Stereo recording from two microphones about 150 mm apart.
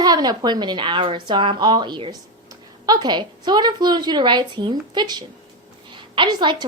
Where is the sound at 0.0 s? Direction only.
25° right (ahead or behind).